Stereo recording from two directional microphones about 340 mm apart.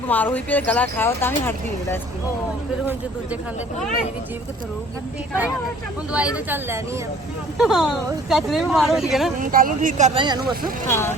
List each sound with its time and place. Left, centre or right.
0.1 s speech: centre
6.1 s speech: centre
9.4 s speech: right
10.8 s speech: centre